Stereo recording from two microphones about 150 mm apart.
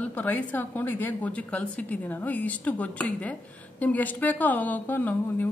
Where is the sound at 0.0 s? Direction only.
10° left (ahead or behind).